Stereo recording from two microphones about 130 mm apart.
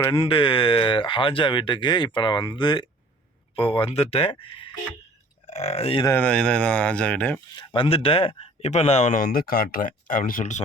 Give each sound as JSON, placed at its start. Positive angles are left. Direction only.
{"t": 0.1, "sound": "speech", "side_deg": 40}
{"t": 5.5, "sound": "speech", "side_deg": 55}
{"t": 6.1, "sound": "speech", "side_deg": 10}
{"t": 7.5, "sound": "speech", "side_deg": 40}